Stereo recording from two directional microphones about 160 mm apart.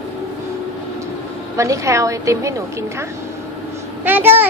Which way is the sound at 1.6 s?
20° right (ahead or behind).